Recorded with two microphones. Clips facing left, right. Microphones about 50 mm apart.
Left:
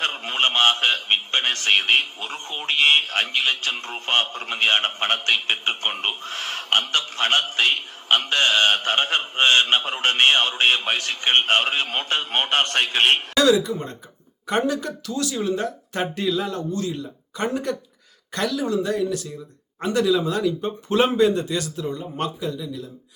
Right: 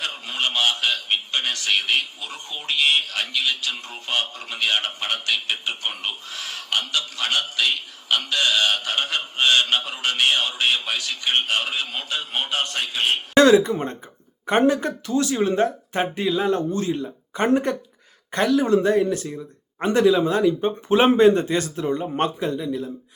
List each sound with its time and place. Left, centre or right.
0.0 s a man's voice: left
13.3 s speech: right